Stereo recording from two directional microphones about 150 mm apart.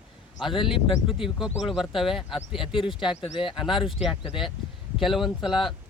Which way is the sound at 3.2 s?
35° left (ahead or behind).